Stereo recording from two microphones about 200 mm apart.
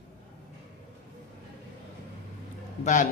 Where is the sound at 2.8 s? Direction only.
40° left (ahead or behind).